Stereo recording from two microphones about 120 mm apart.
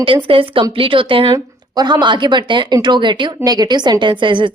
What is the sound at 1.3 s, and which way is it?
Speech, 30° right (ahead or behind).